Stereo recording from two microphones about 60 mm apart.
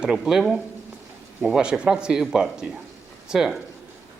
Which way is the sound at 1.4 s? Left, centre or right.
Centre.